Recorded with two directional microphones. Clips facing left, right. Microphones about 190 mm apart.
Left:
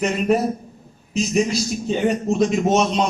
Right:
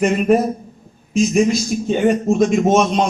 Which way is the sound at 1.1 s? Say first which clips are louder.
Right 5 dB; 50° right (ahead or behind).